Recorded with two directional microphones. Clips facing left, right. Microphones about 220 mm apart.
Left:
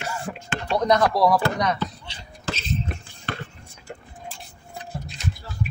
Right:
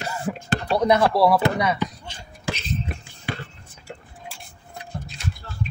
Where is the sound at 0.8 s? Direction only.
10° right (ahead or behind).